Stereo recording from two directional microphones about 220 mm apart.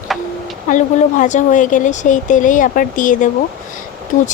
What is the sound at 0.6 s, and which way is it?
A woman's voice, 35° left (ahead or behind).